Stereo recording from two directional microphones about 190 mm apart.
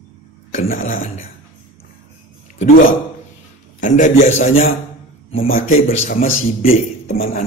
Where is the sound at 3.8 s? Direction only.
40° left (ahead or behind).